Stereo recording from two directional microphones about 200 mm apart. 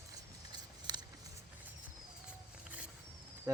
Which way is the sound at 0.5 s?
20° right (ahead or behind).